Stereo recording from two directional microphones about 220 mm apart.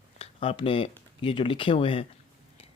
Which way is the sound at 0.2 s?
25° left (ahead or behind).